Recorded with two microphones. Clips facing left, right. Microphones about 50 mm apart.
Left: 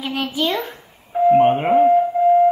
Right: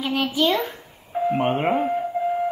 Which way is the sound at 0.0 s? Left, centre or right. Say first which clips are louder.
Right 1 dB; centre.